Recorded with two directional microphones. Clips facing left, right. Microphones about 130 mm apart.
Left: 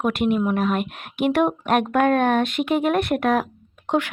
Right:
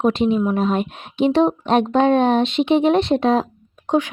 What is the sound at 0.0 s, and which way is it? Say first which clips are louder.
Speech: right 3 dB; 25° right (ahead or behind).